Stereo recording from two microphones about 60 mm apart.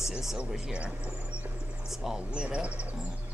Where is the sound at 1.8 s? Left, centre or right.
Centre; by 3.0 s right.